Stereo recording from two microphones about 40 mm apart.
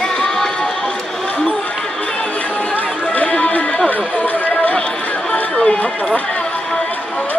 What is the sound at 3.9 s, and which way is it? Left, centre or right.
Speech, left.